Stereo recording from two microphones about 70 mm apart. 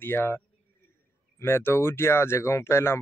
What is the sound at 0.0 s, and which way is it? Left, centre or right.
Speech, left.